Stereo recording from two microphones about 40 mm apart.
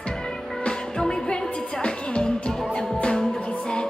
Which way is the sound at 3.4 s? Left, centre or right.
Left.